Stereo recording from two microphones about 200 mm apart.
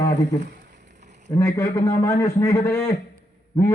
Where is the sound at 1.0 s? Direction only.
35° right (ahead or behind).